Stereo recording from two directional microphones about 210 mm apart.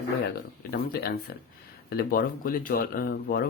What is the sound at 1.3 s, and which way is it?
Speech, 45° left (ahead or behind).